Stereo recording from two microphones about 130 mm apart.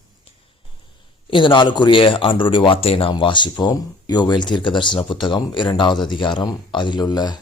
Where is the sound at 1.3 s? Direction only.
40° left (ahead or behind).